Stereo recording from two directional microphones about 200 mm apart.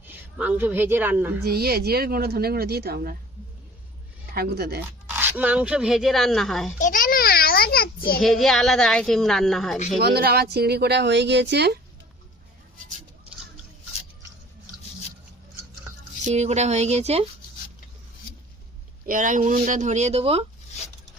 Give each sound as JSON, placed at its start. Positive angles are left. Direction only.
{"t": 0.0, "sound": "a woman's voice", "side_deg": -10}
{"t": 1.5, "sound": "speech", "side_deg": -50}
{"t": 4.4, "sound": "speech", "side_deg": -50}
{"t": 5.0, "sound": "speech", "side_deg": -10}
{"t": 6.7, "sound": "a sound", "side_deg": 40}
{"t": 8.2, "sound": "speech", "side_deg": 0}
{"t": 10.0, "sound": "speech", "side_deg": -50}
{"t": 16.2, "sound": "speech", "side_deg": -35}
{"t": 19.0, "sound": "speech", "side_deg": -40}